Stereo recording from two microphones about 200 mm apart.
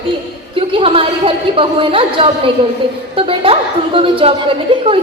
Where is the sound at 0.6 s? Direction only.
25° right (ahead or behind).